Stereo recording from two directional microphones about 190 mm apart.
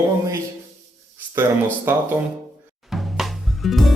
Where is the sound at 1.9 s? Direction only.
10° right (ahead or behind).